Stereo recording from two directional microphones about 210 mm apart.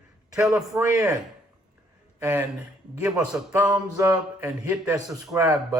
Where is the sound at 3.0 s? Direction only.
5° right (ahead or behind).